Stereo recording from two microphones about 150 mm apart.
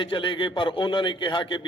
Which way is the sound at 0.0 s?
35° left (ahead or behind).